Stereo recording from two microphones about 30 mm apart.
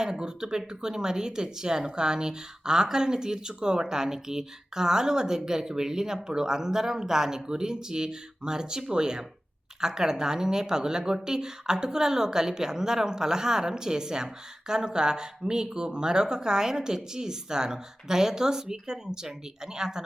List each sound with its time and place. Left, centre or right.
0.0 s speech: right